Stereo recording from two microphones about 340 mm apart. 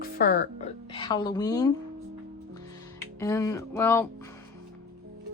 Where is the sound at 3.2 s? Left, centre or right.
Centre.